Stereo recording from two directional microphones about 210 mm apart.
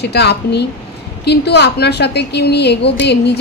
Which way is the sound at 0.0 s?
50° left (ahead or behind).